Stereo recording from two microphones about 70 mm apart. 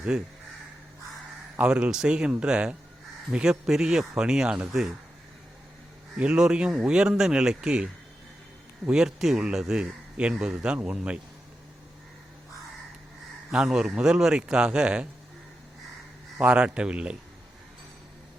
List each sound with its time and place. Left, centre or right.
0.1 s speech: centre
1.5 s speech: centre
6.1 s speech: centre
8.9 s speech: centre
13.5 s speech: centre
16.4 s speech: centre